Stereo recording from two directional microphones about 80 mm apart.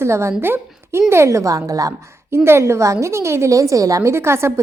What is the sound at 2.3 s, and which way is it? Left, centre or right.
A woman's voice, right.